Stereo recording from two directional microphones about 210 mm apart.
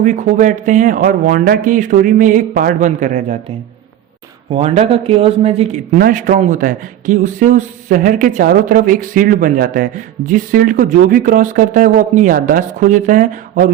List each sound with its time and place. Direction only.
0.0 s a man's voice: 35° right (ahead or behind)
4.5 s a man's voice: 30° right (ahead or behind)